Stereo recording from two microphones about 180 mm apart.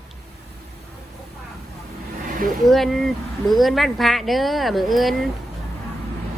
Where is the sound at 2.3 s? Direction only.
50° right (ahead or behind).